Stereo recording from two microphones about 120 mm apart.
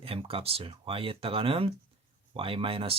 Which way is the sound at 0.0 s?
50° right (ahead or behind).